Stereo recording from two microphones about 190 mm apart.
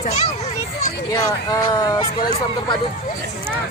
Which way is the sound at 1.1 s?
20° left (ahead or behind).